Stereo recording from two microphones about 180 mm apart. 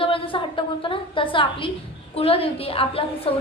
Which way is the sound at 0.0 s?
30° left (ahead or behind).